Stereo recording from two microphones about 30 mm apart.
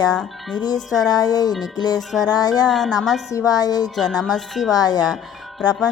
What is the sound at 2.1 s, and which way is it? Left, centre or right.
Speech, centre.